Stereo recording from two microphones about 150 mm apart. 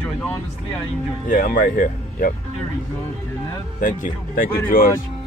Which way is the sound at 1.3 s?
65° left (ahead or behind).